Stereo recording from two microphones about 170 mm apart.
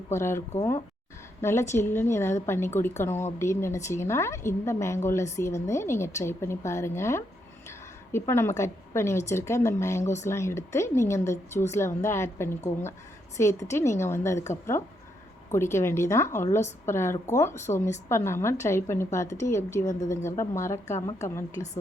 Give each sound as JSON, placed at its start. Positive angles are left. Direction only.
{"t": 0.1, "sound": "a woman's voice", "side_deg": 15}